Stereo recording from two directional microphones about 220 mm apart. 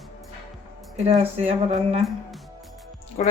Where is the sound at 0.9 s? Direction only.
30° right (ahead or behind).